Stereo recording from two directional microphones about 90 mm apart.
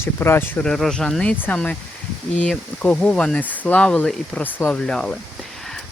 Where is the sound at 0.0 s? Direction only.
25° left (ahead or behind).